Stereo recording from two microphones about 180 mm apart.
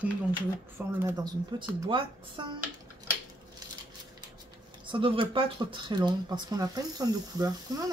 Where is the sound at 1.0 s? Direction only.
20° right (ahead or behind).